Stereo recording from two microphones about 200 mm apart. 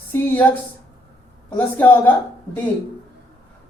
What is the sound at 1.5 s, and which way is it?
Speech, 10° left (ahead or behind).